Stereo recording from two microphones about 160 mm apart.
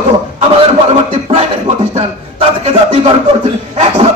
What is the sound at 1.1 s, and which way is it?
A man's voice, 40° right (ahead or behind).